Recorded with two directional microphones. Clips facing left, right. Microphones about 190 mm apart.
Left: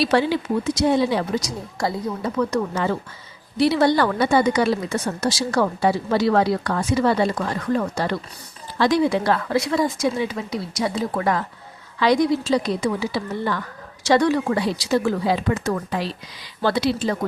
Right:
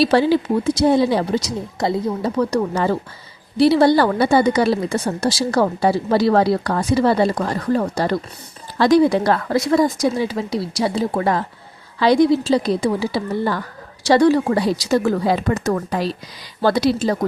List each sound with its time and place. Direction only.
0.0 s a woman's voice: 35° right (ahead or behind)